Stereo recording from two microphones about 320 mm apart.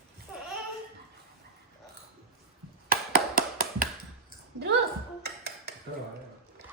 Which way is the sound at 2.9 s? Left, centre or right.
Right.